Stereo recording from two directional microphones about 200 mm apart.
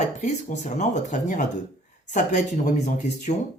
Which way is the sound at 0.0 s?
35° left (ahead or behind).